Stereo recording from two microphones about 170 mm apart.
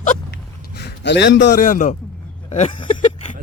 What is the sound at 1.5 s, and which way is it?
Speech, 50° left (ahead or behind).